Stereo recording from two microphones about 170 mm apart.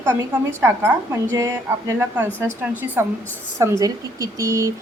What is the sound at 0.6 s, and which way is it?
A woman's voice, 15° right (ahead or behind).